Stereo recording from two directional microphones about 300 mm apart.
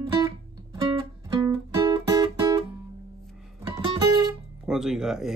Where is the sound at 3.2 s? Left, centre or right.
Centre.